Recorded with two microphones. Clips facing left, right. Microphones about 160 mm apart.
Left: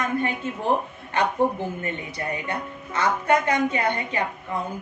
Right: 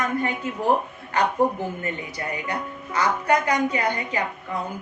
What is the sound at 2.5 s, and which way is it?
A woman's voice, 25° left (ahead or behind).